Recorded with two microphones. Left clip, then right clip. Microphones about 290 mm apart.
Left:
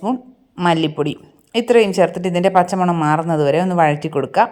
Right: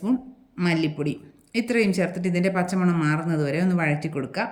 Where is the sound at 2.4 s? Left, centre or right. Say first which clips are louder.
Left 12 dB; left.